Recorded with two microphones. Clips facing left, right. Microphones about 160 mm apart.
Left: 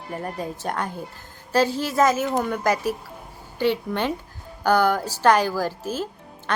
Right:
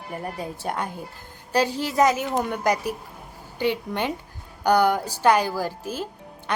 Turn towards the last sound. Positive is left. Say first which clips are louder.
# left 2 dB
turn(degrees=-15)  # may be behind; listen again after turning